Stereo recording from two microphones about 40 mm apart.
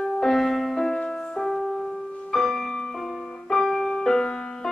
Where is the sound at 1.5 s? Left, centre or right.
Centre.